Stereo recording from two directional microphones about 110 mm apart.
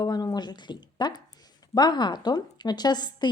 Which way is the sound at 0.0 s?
35° left (ahead or behind).